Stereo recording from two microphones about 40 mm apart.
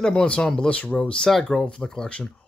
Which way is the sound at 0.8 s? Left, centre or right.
Left.